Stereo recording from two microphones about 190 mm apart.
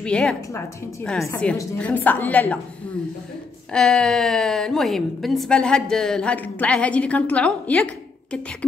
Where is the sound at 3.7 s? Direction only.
5° left (ahead or behind).